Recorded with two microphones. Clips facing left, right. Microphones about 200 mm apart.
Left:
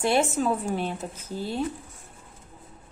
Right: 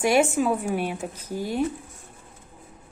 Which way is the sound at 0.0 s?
10° right (ahead or behind).